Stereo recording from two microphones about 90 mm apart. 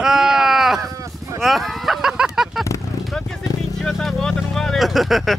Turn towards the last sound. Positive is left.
turn(degrees=0)  # may be behind; listen again after turning